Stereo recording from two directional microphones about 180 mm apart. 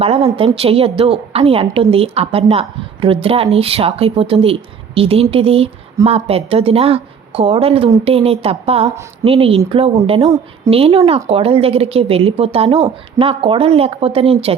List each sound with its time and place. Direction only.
0.0 s a woman's voice: 35° right (ahead or behind)
10.2 s a woman's voice: 20° right (ahead or behind)
10.7 s a woman's voice: 35° right (ahead or behind)